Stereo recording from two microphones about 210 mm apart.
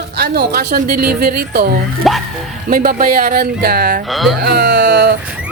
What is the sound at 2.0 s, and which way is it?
Speech, centre (ahead or behind).